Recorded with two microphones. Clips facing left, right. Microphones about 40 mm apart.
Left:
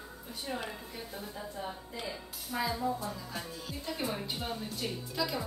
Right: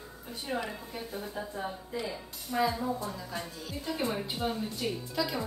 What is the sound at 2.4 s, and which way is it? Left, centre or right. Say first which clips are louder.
A woman's voice: right 3 dB; centre.